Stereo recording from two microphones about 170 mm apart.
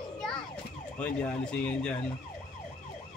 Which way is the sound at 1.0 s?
5° left (ahead or behind).